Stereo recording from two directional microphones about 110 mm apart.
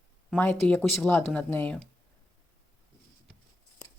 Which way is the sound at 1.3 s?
15° left (ahead or behind).